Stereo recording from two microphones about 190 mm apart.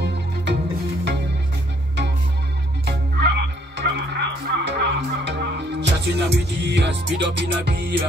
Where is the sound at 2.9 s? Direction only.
60° right (ahead or behind).